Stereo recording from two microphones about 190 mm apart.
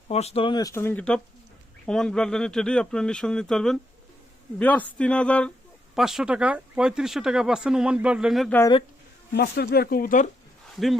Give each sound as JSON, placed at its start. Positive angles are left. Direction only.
{"t": 0.1, "sound": "speech", "side_deg": 35}
{"t": 9.3, "sound": "speech", "side_deg": 60}